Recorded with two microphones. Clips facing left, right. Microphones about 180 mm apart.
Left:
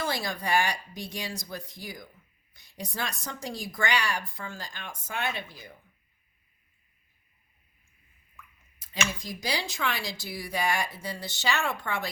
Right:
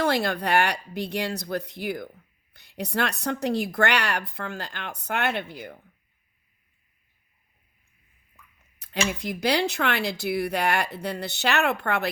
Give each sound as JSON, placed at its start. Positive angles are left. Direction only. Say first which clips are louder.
{"t": 0.0, "sound": "a woman's voice", "louder": "right 7 dB", "side_deg": -65}
{"t": 9.0, "sound": "a woman's voice", "louder": "right 10 dB", "side_deg": -65}